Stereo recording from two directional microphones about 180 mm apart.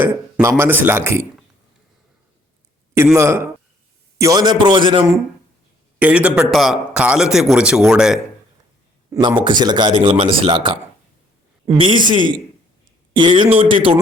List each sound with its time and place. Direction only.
0.0 s a man's voice: 10° right (ahead or behind)
3.2 s a man's voice: 15° right (ahead or behind)
6.0 s a man's voice: 5° right (ahead or behind)
9.4 s speech: 25° right (ahead or behind)
11.8 s speech: 25° right (ahead or behind)